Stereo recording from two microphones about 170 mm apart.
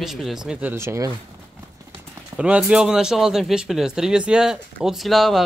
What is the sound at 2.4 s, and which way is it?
Speech, 5° right (ahead or behind).